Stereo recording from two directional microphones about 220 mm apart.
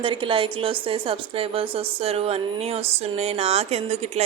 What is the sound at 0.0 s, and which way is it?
Music, 25° right (ahead or behind).